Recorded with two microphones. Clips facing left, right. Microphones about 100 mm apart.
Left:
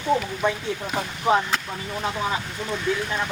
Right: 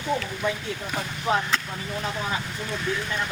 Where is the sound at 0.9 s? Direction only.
25° left (ahead or behind).